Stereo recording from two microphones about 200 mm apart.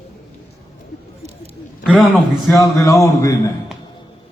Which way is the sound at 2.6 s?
15° left (ahead or behind).